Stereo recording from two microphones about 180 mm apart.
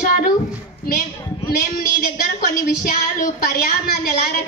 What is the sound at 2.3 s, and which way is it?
A woman's voice, 55° left (ahead or behind).